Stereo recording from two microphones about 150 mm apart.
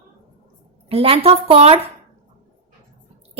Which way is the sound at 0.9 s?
40° right (ahead or behind).